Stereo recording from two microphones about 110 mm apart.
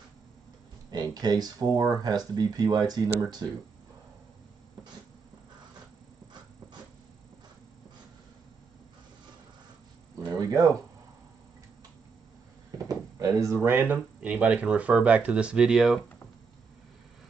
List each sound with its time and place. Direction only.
0.9 s speech: 40° right (ahead or behind)
10.3 s a sound: 35° right (ahead or behind)
12.7 s drawer open or close: 30° right (ahead or behind)
13.6 s speech: 15° right (ahead or behind)